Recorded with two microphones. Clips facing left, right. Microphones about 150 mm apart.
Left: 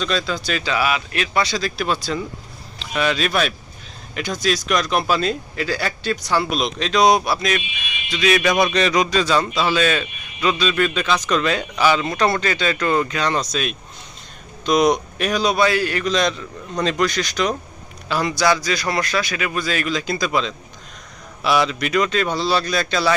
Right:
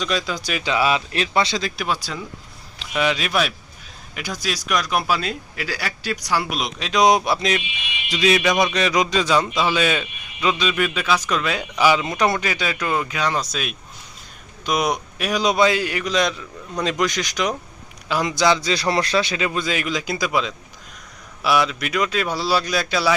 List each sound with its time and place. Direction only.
0.0 s a man's voice: 10° right (ahead or behind)
8.1 s speech: 30° right (ahead or behind)
8.6 s a man's voice: 10° right (ahead or behind)